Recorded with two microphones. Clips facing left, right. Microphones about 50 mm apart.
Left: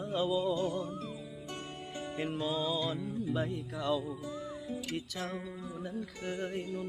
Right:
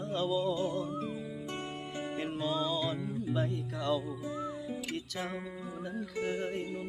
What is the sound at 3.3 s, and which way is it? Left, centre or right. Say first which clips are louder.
Music: right 1 dB; centre.